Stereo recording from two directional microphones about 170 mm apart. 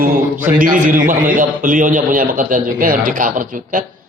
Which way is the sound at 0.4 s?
50° right (ahead or behind).